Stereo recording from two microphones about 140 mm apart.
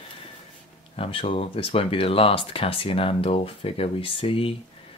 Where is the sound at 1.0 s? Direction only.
40° left (ahead or behind).